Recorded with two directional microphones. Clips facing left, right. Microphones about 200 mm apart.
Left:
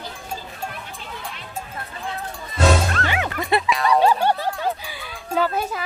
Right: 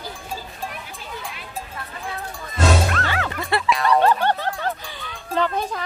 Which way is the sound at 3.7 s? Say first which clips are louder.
Right 3 dB; centre (ahead or behind).